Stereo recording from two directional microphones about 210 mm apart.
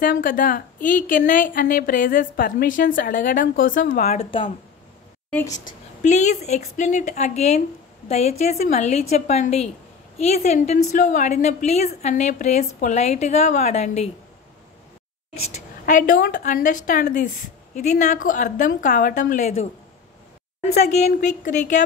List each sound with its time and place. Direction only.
0.0 s a woman's voice: 40° left (ahead or behind)
4.2 s speech: 25° left (ahead or behind)
5.3 s a woman's voice: 15° left (ahead or behind)
5.7 s a woman's voice: 35° left (ahead or behind)
15.4 s a woman's voice: 35° left (ahead or behind)
20.7 s a woman's voice: 30° left (ahead or behind)